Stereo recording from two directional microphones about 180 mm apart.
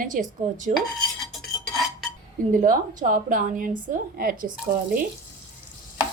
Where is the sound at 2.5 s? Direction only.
50° right (ahead or behind).